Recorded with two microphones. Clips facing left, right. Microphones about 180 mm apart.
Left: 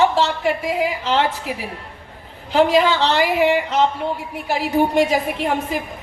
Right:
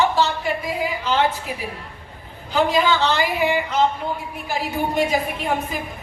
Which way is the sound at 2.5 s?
75° left (ahead or behind).